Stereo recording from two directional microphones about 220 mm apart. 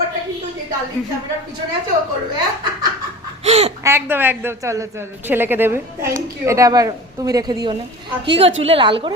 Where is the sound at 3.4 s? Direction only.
30° right (ahead or behind).